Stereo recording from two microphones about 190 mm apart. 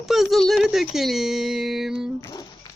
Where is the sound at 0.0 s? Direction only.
Centre (ahead or behind).